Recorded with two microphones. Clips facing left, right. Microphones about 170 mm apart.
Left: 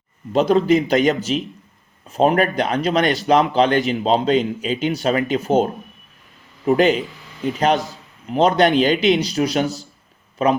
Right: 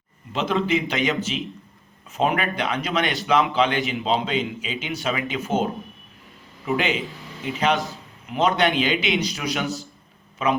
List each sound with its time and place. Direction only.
0.3 s a man's voice: 40° left (ahead or behind)
6.7 s a man's voice: 40° left (ahead or behind)